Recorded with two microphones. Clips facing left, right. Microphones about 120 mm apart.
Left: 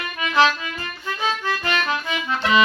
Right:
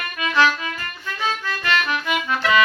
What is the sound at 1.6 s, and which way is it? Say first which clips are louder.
Music: right 4 dB; 20° left (ahead or behind).